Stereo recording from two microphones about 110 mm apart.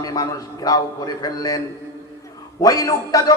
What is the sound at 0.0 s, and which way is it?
A man's voice, 35° left (ahead or behind).